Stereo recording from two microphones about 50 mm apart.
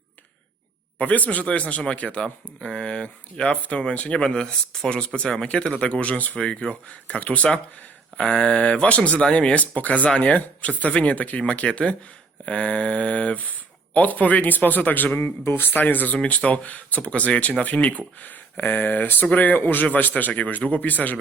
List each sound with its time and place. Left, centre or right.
0.9 s speech: left
6.3 s speech: centre; by 16.1 s left
16.1 s speech: left